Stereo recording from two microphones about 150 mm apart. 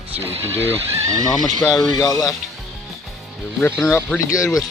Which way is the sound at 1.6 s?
5° left (ahead or behind).